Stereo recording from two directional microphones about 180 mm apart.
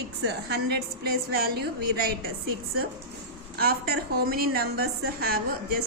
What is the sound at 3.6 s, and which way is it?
A woman's voice, 60° right (ahead or behind).